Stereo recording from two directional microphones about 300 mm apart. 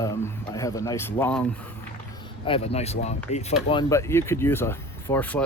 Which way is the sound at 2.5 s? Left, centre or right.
Left.